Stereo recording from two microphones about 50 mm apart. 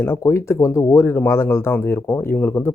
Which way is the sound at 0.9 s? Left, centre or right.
Left.